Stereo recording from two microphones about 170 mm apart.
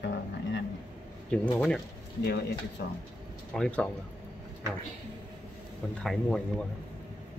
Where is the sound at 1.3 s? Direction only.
5° left (ahead or behind).